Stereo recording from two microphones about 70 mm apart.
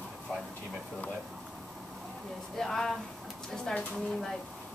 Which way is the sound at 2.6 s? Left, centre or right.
Centre.